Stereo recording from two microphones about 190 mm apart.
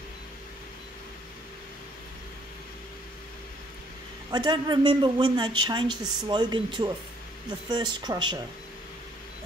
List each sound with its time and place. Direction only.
4.3 s speech: 25° right (ahead or behind)